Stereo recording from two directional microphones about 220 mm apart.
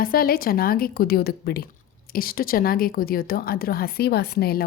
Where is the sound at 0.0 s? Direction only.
40° left (ahead or behind).